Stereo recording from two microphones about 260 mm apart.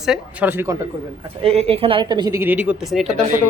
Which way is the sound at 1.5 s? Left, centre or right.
Right.